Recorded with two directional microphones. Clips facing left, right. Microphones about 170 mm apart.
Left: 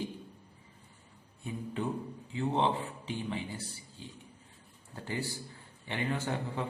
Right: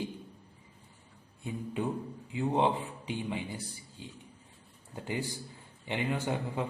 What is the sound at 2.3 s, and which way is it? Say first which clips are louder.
Speech: right 2 dB; 15° right (ahead or behind).